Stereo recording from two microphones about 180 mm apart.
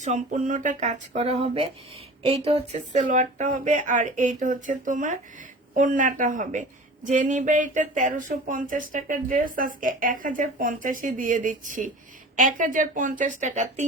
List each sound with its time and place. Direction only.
0.0 s speech: 40° right (ahead or behind)